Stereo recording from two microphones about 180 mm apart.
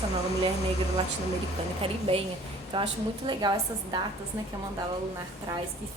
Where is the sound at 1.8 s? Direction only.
30° right (ahead or behind).